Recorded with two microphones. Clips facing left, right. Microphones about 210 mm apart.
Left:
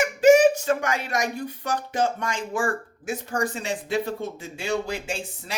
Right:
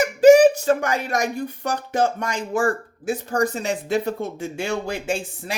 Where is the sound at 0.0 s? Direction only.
35° right (ahead or behind).